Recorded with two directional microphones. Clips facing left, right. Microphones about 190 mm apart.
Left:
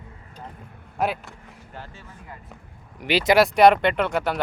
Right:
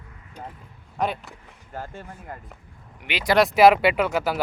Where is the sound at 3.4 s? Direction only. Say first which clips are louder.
Right 1 dB; 5° right (ahead or behind).